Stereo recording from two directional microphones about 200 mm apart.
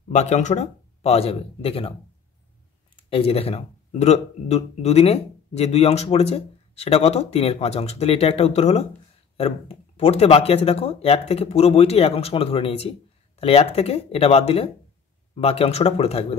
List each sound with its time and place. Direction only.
0.1 s speech: 35° left (ahead or behind)
3.1 s speech: 30° left (ahead or behind)